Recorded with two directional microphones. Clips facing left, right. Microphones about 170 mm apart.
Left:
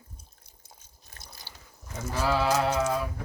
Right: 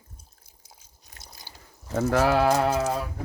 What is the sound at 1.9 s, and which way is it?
Sheep, 70° right (ahead or behind).